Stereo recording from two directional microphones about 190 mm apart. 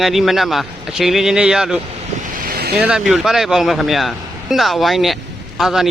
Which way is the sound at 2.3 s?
50° right (ahead or behind).